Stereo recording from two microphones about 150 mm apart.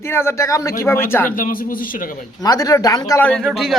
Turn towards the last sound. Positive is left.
turn(degrees=0)  # may be behind; listen again after turning